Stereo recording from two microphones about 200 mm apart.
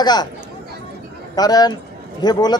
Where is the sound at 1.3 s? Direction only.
20° left (ahead or behind).